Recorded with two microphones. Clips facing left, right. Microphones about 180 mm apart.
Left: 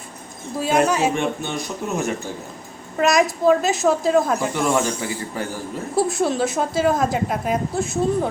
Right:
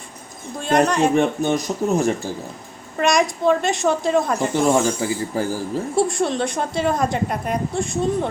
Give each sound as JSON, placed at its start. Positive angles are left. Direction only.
{"t": 0.6, "sound": "a woman's voice", "side_deg": 5}
{"t": 1.1, "sound": "speech", "side_deg": -40}
{"t": 3.0, "sound": "a woman's voice", "side_deg": 0}
{"t": 4.5, "sound": "speech", "side_deg": -30}
{"t": 6.0, "sound": "a woman's voice", "side_deg": 5}